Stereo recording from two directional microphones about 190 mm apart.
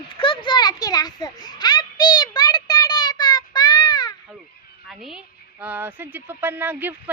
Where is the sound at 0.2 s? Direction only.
25° left (ahead or behind).